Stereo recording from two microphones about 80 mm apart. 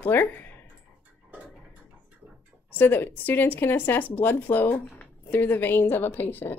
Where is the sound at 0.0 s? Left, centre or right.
Left.